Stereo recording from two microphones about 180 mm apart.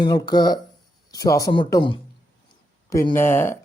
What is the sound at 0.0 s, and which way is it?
Speech, 25° left (ahead or behind).